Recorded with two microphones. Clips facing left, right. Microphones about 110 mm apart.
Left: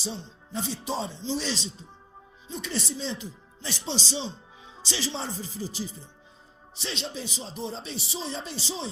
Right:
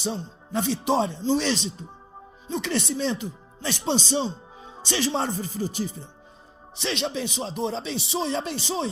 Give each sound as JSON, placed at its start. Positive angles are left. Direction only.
{"t": 0.0, "sound": "speech", "side_deg": -60}
{"t": 6.7, "sound": "speech", "side_deg": -70}